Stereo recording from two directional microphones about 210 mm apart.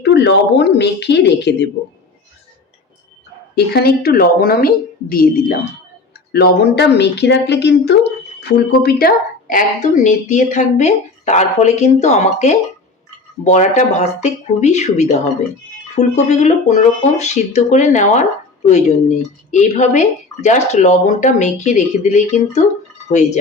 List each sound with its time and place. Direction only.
0.0 s speech: 55° left (ahead or behind)
3.5 s a woman's voice: 50° left (ahead or behind)